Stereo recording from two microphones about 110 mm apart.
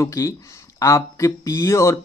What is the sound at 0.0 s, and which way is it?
Speech, 30° left (ahead or behind).